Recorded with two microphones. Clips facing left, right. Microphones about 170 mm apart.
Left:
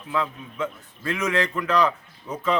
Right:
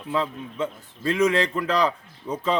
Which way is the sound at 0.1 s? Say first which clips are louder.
Right 1 dB; 30° right (ahead or behind).